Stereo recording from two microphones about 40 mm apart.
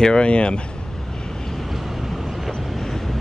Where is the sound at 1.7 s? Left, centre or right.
Centre.